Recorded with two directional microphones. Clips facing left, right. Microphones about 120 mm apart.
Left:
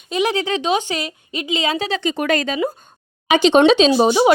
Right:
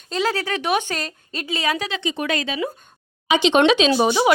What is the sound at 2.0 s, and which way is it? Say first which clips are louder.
A woman's voice: left 5 dB; 45° left (ahead or behind).